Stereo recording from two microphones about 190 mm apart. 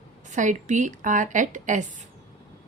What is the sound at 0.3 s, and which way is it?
A woman's voice, 40° right (ahead or behind).